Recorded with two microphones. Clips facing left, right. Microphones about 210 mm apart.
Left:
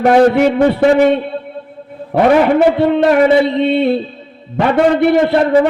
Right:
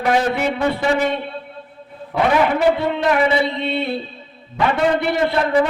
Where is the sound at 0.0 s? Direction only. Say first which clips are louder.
Left 9 dB; 55° left (ahead or behind).